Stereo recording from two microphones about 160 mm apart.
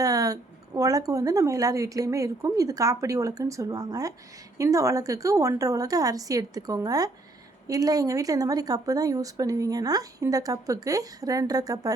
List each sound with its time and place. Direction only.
0.0 s speech: 20° right (ahead or behind)